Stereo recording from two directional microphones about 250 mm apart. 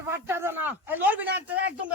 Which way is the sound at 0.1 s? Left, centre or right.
Centre.